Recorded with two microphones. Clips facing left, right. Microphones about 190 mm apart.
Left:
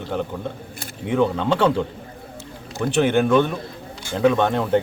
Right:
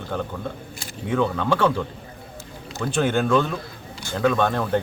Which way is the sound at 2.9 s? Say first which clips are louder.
Left 3 dB; 15° left (ahead or behind).